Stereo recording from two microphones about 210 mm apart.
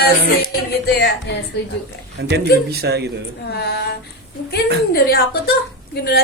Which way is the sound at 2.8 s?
50° right (ahead or behind).